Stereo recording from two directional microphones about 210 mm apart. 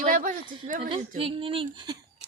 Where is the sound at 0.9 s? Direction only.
25° right (ahead or behind).